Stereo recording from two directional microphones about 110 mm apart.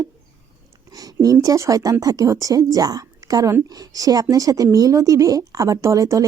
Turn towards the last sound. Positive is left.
turn(degrees=-30)  # may be behind; listen again after turning